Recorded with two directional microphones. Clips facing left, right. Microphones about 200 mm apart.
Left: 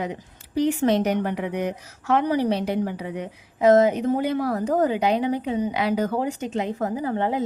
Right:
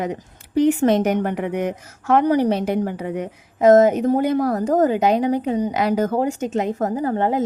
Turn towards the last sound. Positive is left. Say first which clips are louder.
# right 4 dB
turn(degrees=-45)  # may be behind; listen again after turning